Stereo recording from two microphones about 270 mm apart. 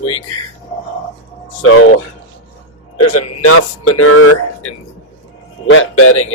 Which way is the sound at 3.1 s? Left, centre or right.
Left.